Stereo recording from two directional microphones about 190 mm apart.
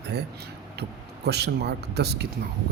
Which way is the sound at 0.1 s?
60° right (ahead or behind).